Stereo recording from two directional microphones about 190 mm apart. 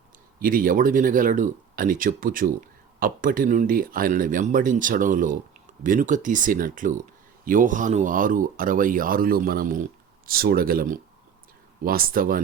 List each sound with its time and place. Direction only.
0.4 s speech: 45° right (ahead or behind)